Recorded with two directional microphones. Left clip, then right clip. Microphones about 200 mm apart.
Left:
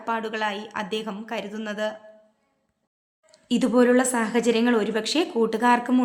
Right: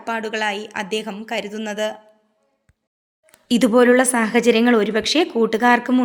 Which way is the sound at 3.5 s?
30° right (ahead or behind).